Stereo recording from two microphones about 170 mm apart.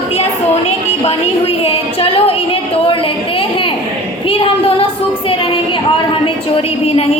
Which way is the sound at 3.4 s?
30° left (ahead or behind).